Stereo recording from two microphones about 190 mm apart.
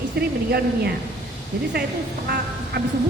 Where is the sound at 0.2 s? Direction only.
60° right (ahead or behind).